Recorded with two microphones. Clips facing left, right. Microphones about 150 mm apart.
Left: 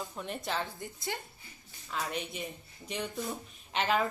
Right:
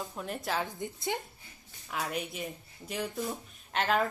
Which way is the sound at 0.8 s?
20° right (ahead or behind).